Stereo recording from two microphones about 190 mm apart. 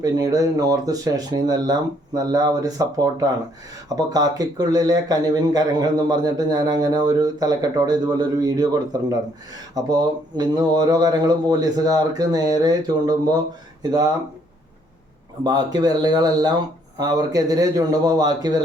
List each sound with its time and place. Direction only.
0.0 s a man's voice: 20° right (ahead or behind)
15.4 s a man's voice: 20° right (ahead or behind)